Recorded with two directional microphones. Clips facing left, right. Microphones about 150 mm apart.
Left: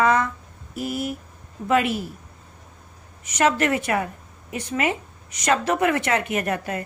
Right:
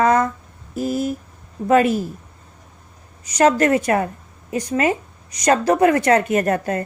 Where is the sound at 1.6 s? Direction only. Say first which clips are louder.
Right 6 dB; 40° right (ahead or behind).